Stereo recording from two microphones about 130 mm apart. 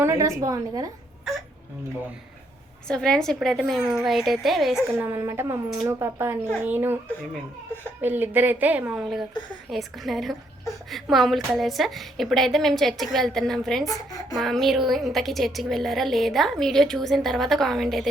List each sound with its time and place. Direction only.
0.0 s a woman's voice: 25° right (ahead or behind)
2.8 s a woman's voice: 5° left (ahead or behind)
4.9 s a woman's voice: 15° right (ahead or behind)
8.0 s a woman's voice: 15° right (ahead or behind)
9.6 s a woman's voice: centre (ahead or behind)
13.8 s speech: 30° left (ahead or behind)
14.3 s a woman's voice: centre (ahead or behind)